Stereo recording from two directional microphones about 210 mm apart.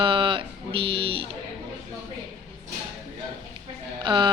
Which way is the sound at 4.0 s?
20° right (ahead or behind).